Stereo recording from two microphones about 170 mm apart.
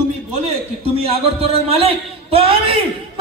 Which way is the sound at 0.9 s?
35° right (ahead or behind).